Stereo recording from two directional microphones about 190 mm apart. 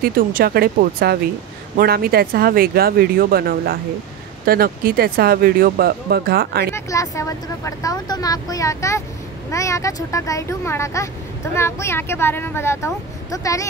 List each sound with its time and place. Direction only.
0.0 s speech: 45° right (ahead or behind)
6.7 s speech: 15° left (ahead or behind)